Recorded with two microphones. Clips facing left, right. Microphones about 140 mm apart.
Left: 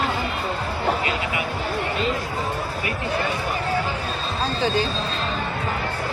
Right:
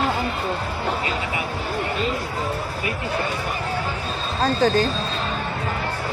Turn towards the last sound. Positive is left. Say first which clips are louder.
# right 4 dB
turn(degrees=-45)  # may be behind; listen again after turning